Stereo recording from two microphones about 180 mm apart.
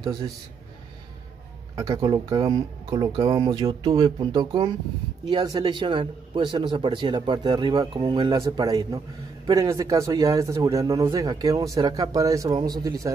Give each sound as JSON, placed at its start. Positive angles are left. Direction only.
{"t": 1.8, "sound": "a man's voice", "side_deg": -20}